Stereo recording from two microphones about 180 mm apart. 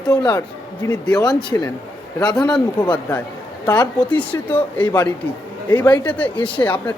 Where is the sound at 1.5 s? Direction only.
15° left (ahead or behind).